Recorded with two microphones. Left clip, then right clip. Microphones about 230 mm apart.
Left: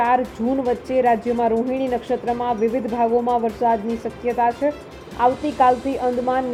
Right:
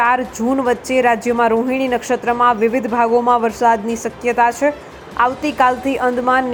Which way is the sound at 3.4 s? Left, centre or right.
Right.